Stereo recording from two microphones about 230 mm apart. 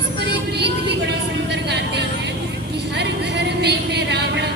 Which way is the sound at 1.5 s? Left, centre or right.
Right.